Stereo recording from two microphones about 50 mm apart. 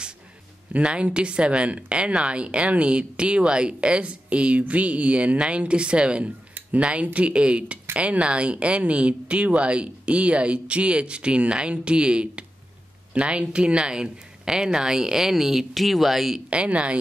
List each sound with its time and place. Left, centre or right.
0.7 s speech: right; by 16.4 s centre
16.4 s speech: right